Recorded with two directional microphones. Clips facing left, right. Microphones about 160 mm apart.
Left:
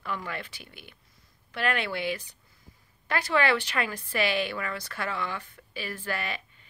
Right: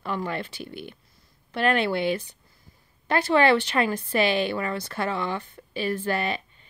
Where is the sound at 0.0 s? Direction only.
30° right (ahead or behind).